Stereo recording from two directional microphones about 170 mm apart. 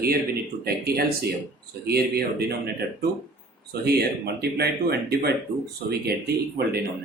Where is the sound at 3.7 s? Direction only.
70° right (ahead or behind).